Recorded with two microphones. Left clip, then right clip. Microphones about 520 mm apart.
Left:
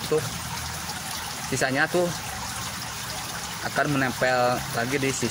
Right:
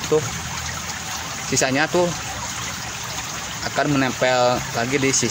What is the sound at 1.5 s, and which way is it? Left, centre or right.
Speech, left.